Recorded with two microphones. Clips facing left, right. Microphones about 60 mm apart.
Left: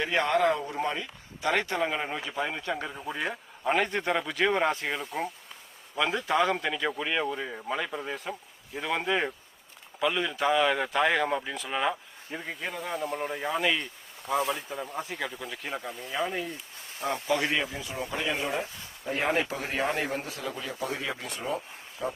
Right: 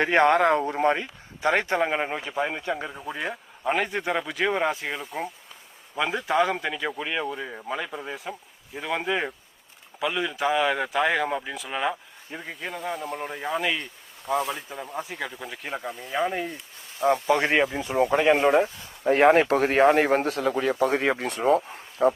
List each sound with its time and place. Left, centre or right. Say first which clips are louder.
0.0 s speech: right 6 dB; right
1.4 s speech: right 4 dB; right
17.1 s speech: right 6 dB; right
21.4 s speech: right 12 dB; right